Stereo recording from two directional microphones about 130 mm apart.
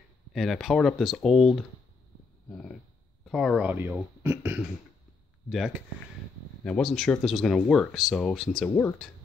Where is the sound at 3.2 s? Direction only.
Centre (ahead or behind).